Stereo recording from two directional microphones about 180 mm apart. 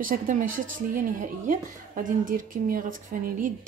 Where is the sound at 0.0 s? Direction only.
50° right (ahead or behind).